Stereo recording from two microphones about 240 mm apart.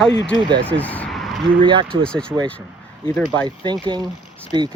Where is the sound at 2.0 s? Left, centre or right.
Centre.